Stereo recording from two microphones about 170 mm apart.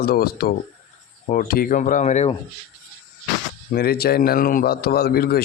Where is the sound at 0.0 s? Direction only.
65° left (ahead or behind); by 2.3 s 45° left (ahead or behind).